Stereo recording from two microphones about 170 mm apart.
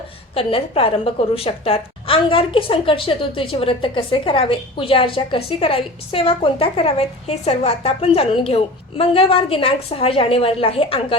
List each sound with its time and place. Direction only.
0.3 s a woman's voice: 35° left (ahead or behind)